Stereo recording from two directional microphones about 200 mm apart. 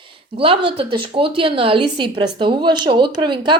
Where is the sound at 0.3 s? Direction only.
30° right (ahead or behind).